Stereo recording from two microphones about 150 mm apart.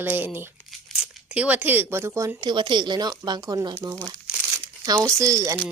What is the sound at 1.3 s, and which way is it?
Speech, 10° right (ahead or behind).